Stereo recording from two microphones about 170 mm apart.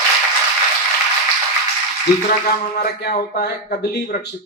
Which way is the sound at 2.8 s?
65° left (ahead or behind).